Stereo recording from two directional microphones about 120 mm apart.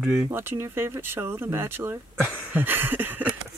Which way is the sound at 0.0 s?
20° right (ahead or behind).